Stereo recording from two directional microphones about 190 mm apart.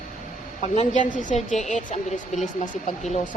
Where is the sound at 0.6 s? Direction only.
40° left (ahead or behind).